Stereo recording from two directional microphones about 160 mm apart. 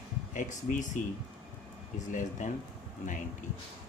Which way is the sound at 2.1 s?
50° left (ahead or behind).